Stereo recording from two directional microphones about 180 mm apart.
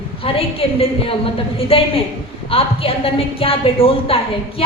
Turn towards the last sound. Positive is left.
turn(degrees=30)  # may be behind; listen again after turning